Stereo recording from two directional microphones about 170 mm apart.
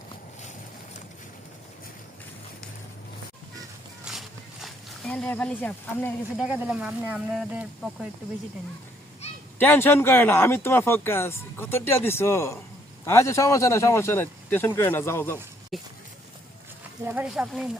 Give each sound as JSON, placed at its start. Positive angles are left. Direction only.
{"t": 4.1, "sound": "horse", "side_deg": -5}
{"t": 4.6, "sound": "speech", "side_deg": 5}
{"t": 6.4, "sound": "speech", "side_deg": -5}
{"t": 9.6, "sound": "speech", "side_deg": 10}
{"t": 15.7, "sound": "speech", "side_deg": 0}
{"t": 17.1, "sound": "speech", "side_deg": -5}